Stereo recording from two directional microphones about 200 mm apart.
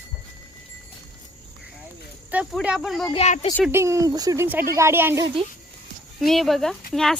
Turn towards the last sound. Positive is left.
turn(degrees=0)  # may be behind; listen again after turning